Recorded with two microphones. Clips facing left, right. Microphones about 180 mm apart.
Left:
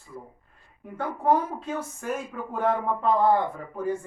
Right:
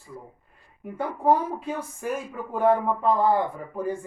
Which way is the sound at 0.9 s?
10° right (ahead or behind).